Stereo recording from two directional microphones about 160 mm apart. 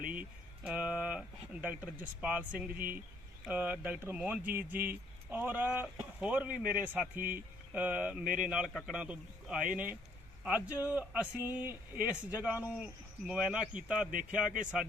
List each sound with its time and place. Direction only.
0.1 s a sound: 10° right (ahead or behind)
1.6 s speech: 10° right (ahead or behind)
8.2 s speech: 60° right (ahead or behind)
8.4 s speech: 5° right (ahead or behind)